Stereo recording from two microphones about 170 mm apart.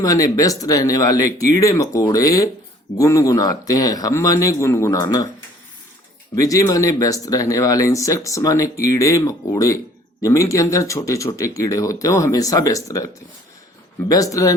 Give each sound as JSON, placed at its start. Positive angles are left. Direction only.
{"t": 0.0, "sound": "speech", "side_deg": 20}
{"t": 6.3, "sound": "speech", "side_deg": 20}
{"t": 14.1, "sound": "speech", "side_deg": 20}